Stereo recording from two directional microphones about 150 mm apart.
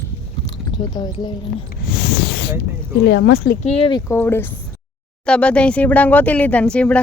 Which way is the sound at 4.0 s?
15° left (ahead or behind).